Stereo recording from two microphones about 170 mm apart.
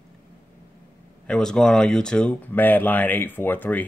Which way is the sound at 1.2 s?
5° left (ahead or behind).